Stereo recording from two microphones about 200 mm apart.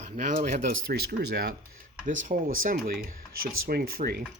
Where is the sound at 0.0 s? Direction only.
40° right (ahead or behind).